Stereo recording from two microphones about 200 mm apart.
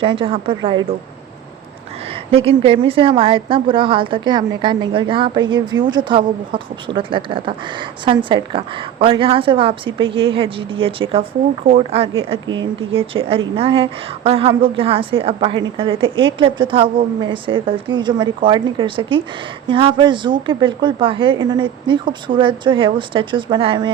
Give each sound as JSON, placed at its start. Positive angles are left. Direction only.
{"t": 0.0, "sound": "a woman's voice", "side_deg": -25}
{"t": 2.0, "sound": "a woman's voice", "side_deg": -30}